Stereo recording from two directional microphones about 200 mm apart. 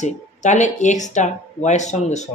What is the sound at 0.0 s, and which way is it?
Speech, 35° left (ahead or behind).